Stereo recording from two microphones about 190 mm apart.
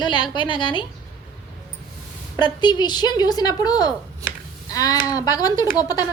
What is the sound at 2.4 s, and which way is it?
A woman's voice, 25° left (ahead or behind).